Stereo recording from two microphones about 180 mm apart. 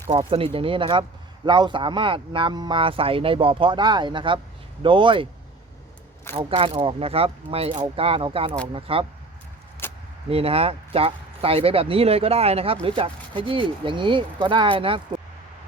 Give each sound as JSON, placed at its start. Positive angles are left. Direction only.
{"t": 0.1, "sound": "speech", "side_deg": -30}
{"t": 6.3, "sound": "speech", "side_deg": -30}
{"t": 9.8, "sound": "a sound", "side_deg": 10}
{"t": 10.2, "sound": "speech", "side_deg": -35}